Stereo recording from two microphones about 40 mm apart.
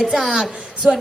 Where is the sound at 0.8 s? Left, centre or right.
Right.